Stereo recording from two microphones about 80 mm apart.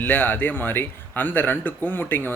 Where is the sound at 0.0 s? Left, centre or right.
Left.